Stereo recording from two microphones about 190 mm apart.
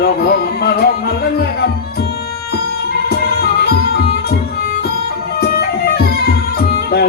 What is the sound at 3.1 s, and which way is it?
Music, 55° left (ahead or behind).